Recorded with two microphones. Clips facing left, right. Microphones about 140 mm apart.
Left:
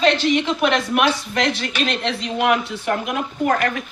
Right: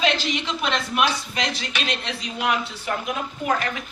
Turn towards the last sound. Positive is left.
turn(degrees=55)  # may be behind; listen again after turning